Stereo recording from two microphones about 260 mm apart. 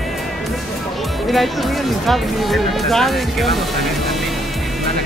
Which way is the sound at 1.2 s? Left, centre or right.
Centre.